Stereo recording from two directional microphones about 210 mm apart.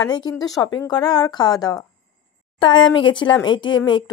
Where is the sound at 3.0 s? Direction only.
25° left (ahead or behind).